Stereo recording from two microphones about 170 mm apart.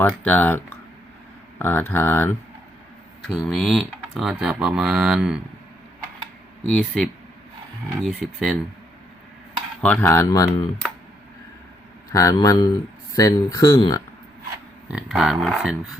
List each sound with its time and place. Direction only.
0.3 s speech: 10° left (ahead or behind)
3.3 s speech: centre (ahead or behind)
6.6 s speech: 5° left (ahead or behind)
9.8 s speech: 10° left (ahead or behind)
12.1 s speech: 20° left (ahead or behind)
14.8 s speech: 5° right (ahead or behind)